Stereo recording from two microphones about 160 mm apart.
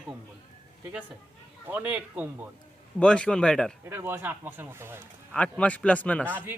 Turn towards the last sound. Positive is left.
turn(degrees=10)  # may be behind; listen again after turning